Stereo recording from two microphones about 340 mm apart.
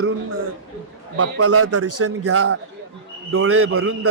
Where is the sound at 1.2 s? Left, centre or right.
Right.